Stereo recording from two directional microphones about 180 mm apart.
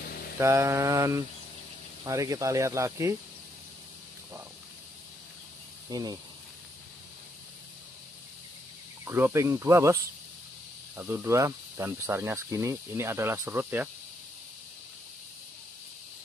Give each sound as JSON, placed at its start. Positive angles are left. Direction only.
{"t": 0.4, "sound": "speech", "side_deg": -15}
{"t": 5.9, "sound": "speech", "side_deg": -20}
{"t": 9.0, "sound": "speech", "side_deg": -10}
{"t": 11.0, "sound": "speech", "side_deg": -10}